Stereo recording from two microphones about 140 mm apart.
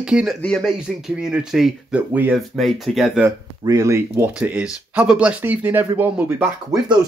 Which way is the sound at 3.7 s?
25° right (ahead or behind).